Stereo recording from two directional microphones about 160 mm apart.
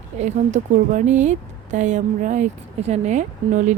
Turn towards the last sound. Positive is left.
turn(degrees=-50)  # may be behind; listen again after turning